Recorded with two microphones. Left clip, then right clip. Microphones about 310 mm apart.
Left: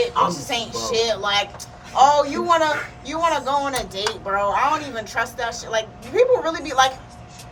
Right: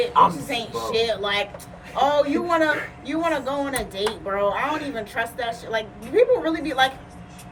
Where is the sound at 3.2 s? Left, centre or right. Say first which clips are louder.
Left 4 dB; centre.